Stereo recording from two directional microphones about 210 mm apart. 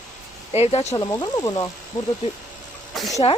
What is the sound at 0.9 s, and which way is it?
Speech, 15° left (ahead or behind).